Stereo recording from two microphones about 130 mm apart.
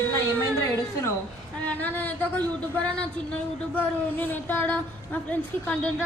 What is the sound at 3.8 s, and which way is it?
A woman's voice, 15° left (ahead or behind).